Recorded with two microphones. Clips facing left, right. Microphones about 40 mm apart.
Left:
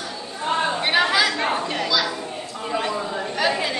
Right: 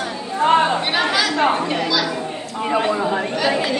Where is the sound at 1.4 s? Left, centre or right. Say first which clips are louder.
Right 6 dB; right.